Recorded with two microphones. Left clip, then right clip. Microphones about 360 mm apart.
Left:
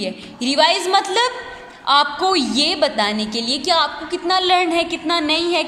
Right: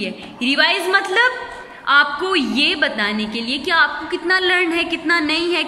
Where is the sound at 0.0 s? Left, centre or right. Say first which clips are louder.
Right 1 dB; centre.